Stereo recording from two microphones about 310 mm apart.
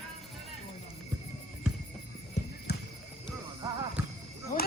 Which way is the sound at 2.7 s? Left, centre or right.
Left.